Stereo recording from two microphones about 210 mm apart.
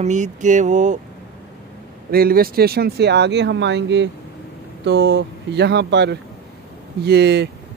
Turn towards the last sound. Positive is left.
turn(degrees=-50)  # may be behind; listen again after turning